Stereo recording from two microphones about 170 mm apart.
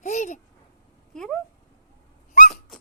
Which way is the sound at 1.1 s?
5° left (ahead or behind).